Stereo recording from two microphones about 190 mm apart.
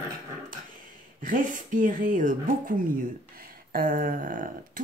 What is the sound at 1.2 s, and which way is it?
A woman's voice, 45° right (ahead or behind).